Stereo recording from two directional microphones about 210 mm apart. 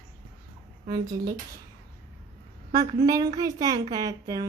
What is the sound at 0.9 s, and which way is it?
Speech, 20° right (ahead or behind).